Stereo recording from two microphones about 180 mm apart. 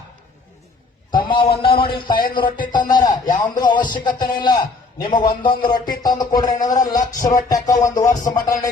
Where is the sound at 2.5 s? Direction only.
50° left (ahead or behind).